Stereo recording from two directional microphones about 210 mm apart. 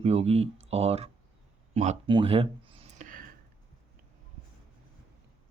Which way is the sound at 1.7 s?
30° right (ahead or behind).